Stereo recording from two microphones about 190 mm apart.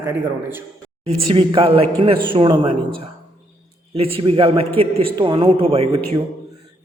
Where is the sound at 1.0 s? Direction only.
30° right (ahead or behind).